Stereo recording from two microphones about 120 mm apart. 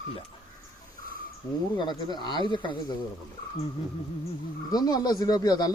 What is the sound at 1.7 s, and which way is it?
A man's voice, 35° left (ahead or behind).